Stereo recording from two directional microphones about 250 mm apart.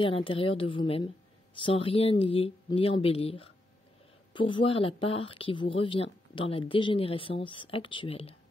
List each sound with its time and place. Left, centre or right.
0.0 s a woman's voice: left